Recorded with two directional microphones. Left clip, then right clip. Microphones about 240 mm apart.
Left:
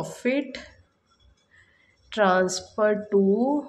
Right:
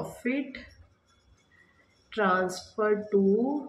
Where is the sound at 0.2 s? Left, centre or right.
Left.